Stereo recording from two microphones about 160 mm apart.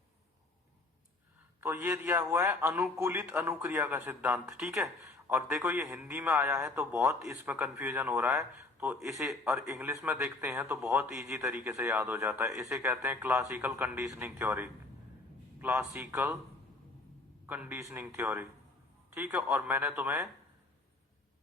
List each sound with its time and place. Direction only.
1.6 s a man's voice: 10° right (ahead or behind)
9.1 s a man's voice: 5° right (ahead or behind)
9.6 s a man's voice: 15° right (ahead or behind)
17.4 s a man's voice: 15° right (ahead or behind)